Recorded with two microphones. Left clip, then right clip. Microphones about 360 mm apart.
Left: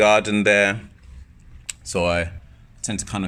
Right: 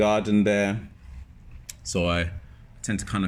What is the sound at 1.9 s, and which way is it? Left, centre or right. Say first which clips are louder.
Speech: left 5 dB; centre.